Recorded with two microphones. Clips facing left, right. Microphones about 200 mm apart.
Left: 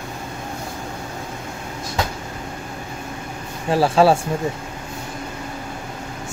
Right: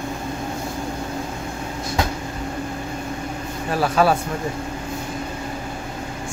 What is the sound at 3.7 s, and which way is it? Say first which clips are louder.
Speech: left 4 dB; 30° left (ahead or behind).